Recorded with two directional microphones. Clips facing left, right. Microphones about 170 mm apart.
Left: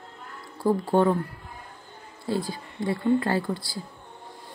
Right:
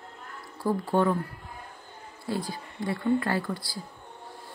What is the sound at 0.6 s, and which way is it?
Speech, 25° left (ahead or behind).